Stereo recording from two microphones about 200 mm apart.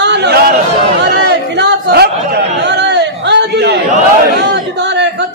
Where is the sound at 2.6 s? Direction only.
60° right (ahead or behind).